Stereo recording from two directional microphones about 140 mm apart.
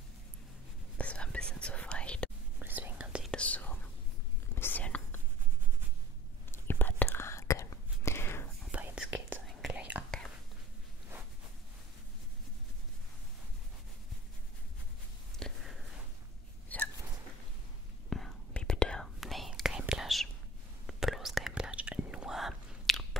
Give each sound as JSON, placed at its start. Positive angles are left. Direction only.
{"t": 0.9, "sound": "whispering", "side_deg": 10}
{"t": 2.6, "sound": "whispering", "side_deg": -15}
{"t": 3.3, "sound": "whispering", "side_deg": 10}
{"t": 6.5, "sound": "whispering", "side_deg": 15}
{"t": 8.7, "sound": "whispering", "side_deg": -10}
{"t": 15.3, "sound": "a sound", "side_deg": 0}
{"t": 16.6, "sound": "hiccup", "side_deg": 10}
{"t": 18.1, "sound": "whispering", "side_deg": 5}